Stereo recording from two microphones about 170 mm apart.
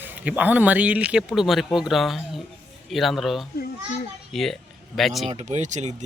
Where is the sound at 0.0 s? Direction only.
10° right (ahead or behind).